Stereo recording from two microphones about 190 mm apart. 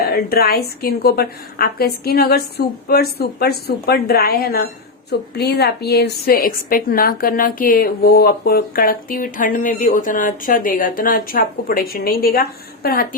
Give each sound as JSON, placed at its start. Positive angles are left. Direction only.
{"t": 0.0, "sound": "a woman's voice", "side_deg": 55}